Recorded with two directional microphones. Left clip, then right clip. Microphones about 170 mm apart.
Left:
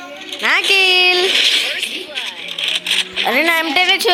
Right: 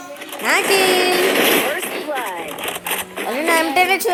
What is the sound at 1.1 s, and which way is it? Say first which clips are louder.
Speech: left 2 dB; 20° right (ahead or behind).